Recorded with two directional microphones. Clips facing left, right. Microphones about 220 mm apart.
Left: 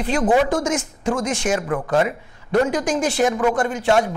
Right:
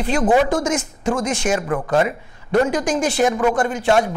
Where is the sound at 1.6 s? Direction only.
25° right (ahead or behind).